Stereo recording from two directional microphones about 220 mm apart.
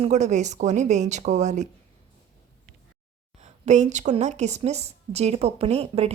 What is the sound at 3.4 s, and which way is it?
A woman's voice, 30° right (ahead or behind).